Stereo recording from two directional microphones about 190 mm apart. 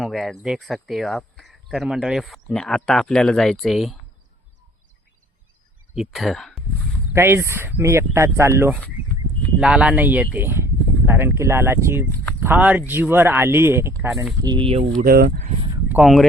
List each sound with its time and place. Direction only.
0.0 s speech: centre (ahead or behind)
5.9 s speech: centre (ahead or behind)
7.1 s speech: 10° right (ahead or behind)
14.4 s speech: 25° right (ahead or behind)
15.0 s speech: 55° right (ahead or behind)
15.9 s speech: 5° right (ahead or behind)